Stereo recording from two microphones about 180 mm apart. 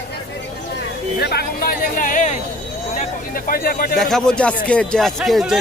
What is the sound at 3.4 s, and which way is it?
Speech, 55° left (ahead or behind).